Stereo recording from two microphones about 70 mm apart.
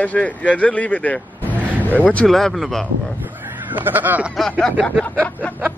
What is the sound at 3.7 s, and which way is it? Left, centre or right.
Honk, right.